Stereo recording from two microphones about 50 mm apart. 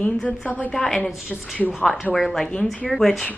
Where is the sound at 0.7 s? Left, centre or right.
Centre.